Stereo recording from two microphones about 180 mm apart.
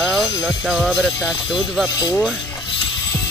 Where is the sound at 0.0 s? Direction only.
Centre (ahead or behind).